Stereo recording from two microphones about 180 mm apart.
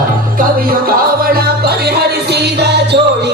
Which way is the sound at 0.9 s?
55° right (ahead or behind).